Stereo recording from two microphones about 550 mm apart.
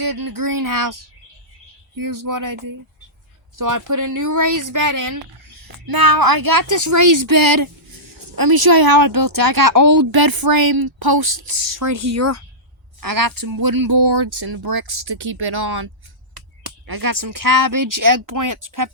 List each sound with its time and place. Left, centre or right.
0.0 s speech: right